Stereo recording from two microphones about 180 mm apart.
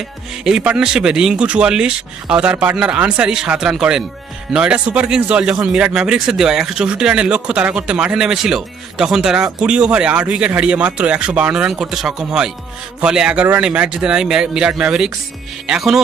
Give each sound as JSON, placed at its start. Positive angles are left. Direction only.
{"t": 0.4, "sound": "speech", "side_deg": -5}